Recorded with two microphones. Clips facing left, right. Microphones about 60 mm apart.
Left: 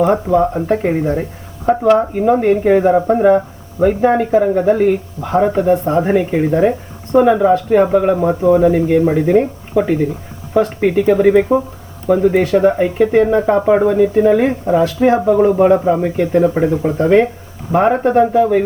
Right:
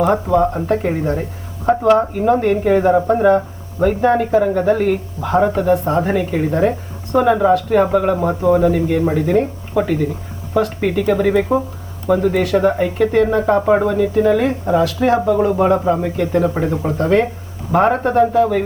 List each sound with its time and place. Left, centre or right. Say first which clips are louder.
0.3 s speech: left 1 dB; left
17.7 s speech: left 2 dB; centre